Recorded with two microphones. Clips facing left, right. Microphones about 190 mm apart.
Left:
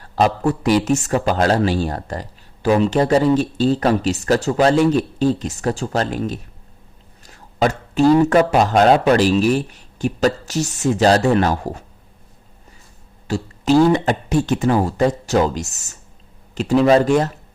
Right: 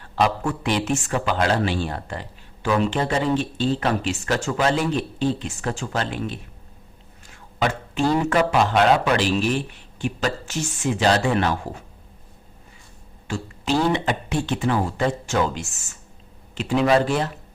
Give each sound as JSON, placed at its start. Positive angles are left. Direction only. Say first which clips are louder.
{"t": 0.0, "sound": "speech", "louder": "left 5 dB", "side_deg": 35}
{"t": 13.2, "sound": "speech", "louder": "left 7 dB", "side_deg": 40}